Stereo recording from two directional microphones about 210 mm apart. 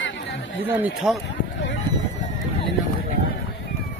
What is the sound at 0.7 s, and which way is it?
Speech, 10° right (ahead or behind).